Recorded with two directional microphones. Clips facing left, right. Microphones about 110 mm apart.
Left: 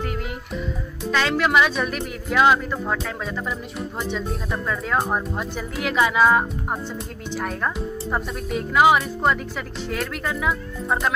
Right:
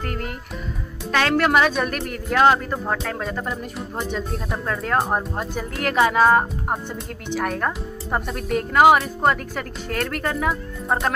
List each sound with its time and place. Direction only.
1.2 s speech: 50° right (ahead or behind)
7.3 s speech: 65° right (ahead or behind)
8.5 s speech: 50° right (ahead or behind)